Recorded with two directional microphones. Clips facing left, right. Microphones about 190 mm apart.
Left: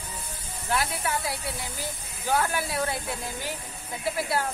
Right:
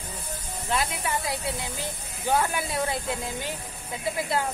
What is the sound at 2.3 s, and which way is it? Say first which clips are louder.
Speech: even; 20° right (ahead or behind).